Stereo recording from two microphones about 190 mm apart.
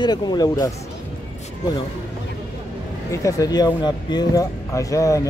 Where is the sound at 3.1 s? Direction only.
15° left (ahead or behind).